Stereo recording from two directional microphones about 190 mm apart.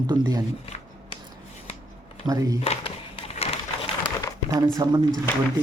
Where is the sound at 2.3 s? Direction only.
20° right (ahead or behind).